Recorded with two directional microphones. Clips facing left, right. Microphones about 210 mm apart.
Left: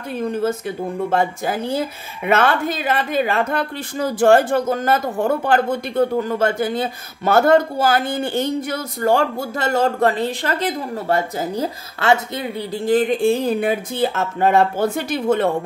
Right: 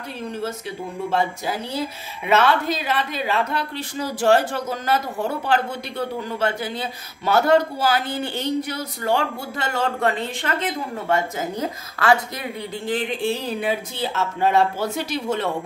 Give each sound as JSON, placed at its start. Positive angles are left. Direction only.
{"t": 0.2, "sound": "speech", "side_deg": 50}
{"t": 12.7, "sound": "speech", "side_deg": 40}